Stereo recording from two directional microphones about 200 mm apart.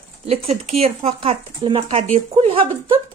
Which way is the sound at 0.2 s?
30° right (ahead or behind).